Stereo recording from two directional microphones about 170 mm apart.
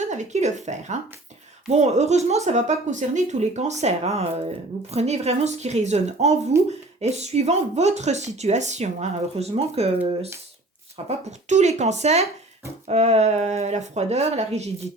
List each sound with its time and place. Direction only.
0.0 s speech: 45° right (ahead or behind)